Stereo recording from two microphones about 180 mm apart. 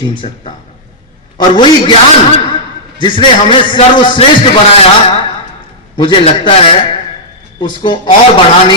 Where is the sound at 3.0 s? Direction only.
25° left (ahead or behind).